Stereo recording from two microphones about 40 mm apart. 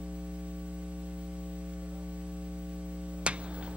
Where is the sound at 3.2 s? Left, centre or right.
Right.